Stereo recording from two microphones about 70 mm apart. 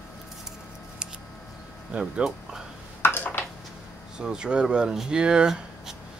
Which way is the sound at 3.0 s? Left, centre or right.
Left.